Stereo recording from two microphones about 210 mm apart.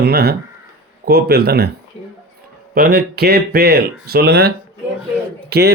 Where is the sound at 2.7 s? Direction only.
45° right (ahead or behind).